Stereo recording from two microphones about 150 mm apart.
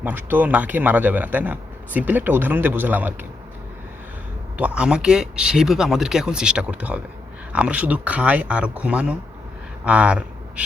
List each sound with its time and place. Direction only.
0.0 s speech: 15° right (ahead or behind)
4.5 s speech: 5° right (ahead or behind)